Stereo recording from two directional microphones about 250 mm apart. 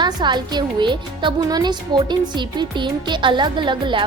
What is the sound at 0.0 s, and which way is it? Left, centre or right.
Speech, centre.